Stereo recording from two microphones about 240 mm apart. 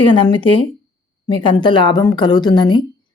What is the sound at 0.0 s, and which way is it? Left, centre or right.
A woman's voice, centre.